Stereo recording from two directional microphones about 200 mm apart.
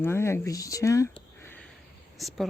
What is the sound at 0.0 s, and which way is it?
Speech, 10° left (ahead or behind).